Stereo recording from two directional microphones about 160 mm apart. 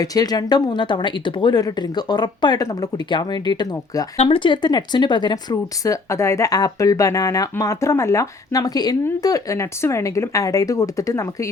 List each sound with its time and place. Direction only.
0.0 s speech: 25° left (ahead or behind)